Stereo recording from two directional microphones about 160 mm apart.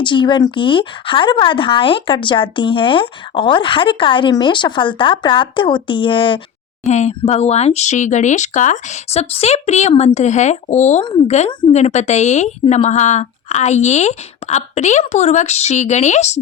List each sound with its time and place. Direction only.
0.0 s speech: 30° left (ahead or behind)
6.8 s a woman's voice: 45° left (ahead or behind)